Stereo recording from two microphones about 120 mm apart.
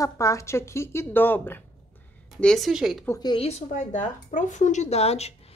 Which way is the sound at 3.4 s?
80° left.